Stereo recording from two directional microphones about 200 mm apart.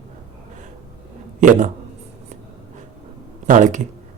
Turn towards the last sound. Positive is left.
turn(degrees=-40)  # may be behind; listen again after turning